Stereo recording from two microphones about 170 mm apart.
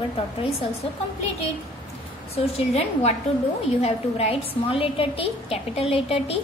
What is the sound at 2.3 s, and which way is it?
A woman's voice, 35° left (ahead or behind).